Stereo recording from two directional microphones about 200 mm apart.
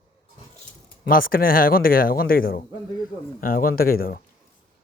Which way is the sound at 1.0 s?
45° left (ahead or behind).